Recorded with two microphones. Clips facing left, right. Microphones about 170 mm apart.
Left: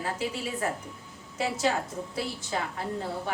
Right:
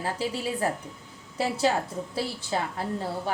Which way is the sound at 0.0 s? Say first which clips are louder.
Right 2 dB; 30° right (ahead or behind).